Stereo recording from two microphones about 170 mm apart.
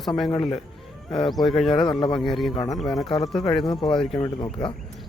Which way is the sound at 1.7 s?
30° left (ahead or behind).